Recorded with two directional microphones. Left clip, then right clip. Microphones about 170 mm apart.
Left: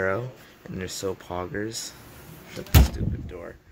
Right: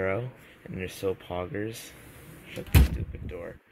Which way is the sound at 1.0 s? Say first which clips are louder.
Even; 10° left (ahead or behind).